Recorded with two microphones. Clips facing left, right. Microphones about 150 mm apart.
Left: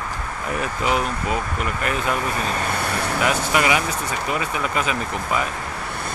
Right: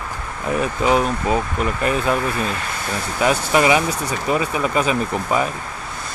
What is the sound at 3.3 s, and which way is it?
Speech, 30° right (ahead or behind).